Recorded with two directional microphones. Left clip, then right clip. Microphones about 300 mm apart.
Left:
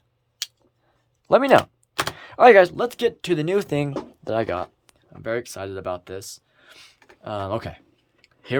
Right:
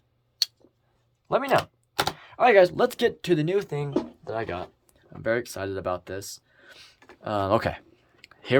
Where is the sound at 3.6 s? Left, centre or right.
Left.